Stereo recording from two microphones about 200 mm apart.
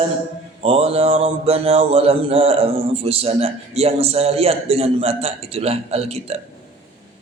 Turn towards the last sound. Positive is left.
turn(degrees=-30)  # may be behind; listen again after turning